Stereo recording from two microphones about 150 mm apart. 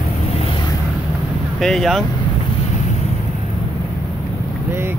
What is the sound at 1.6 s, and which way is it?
Speech, centre (ahead or behind).